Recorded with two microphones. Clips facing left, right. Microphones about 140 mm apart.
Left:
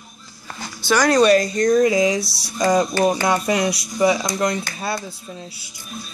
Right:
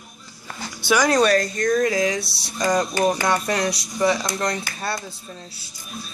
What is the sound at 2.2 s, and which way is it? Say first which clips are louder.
Speech: left 3 dB; 65° right (ahead or behind).